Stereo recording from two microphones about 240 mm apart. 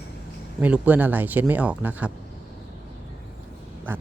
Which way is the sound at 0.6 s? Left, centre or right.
Centre.